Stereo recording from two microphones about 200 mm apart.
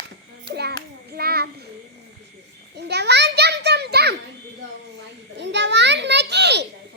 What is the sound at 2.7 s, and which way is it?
Child singing, 55° right (ahead or behind).